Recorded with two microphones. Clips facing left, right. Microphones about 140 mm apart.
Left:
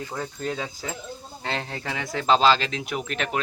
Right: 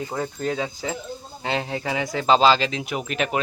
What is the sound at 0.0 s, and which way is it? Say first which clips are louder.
Speech: right 4 dB; 20° right (ahead or behind).